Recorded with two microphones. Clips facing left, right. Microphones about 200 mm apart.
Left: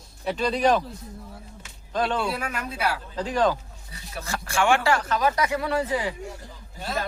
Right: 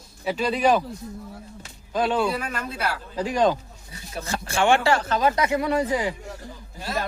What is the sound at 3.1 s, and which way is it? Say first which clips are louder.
A man's voice: right 3 dB; 10° right (ahead or behind).